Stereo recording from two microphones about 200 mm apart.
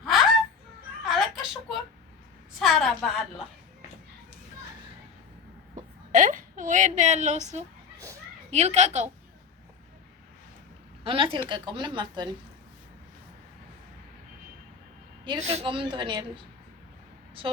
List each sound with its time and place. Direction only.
1.0 s a sound: centre (ahead or behind)
2.6 s a woman's voice: centre (ahead or behind)
5.7 s a woman's voice: 40° right (ahead or behind)
11.0 s a woman's voice: 25° right (ahead or behind)
15.2 s a woman's voice: 30° right (ahead or behind)